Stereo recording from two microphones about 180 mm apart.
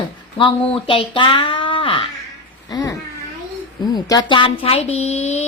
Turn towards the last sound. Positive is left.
turn(degrees=35)  # may be behind; listen again after turning